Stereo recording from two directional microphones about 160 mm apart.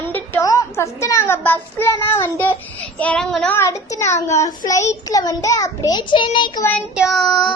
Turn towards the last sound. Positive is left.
turn(degrees=5)  # may be behind; listen again after turning